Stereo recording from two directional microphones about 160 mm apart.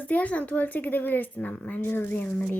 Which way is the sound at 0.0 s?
10° left (ahead or behind).